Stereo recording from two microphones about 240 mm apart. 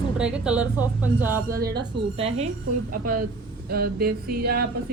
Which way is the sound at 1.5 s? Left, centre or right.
Right.